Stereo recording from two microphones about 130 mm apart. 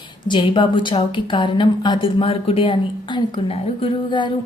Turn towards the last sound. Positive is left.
turn(degrees=35)  # may be behind; listen again after turning